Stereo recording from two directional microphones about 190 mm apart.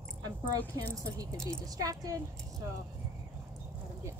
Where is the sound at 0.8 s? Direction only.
15° right (ahead or behind).